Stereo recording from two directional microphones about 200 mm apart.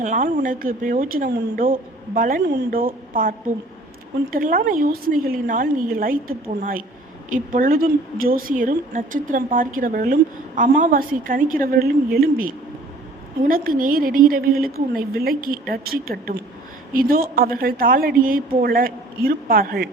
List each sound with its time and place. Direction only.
0.0 s a woman's voice: 40° right (ahead or behind)